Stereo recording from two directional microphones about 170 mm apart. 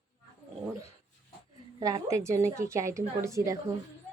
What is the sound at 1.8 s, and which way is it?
Speech, 20° right (ahead or behind).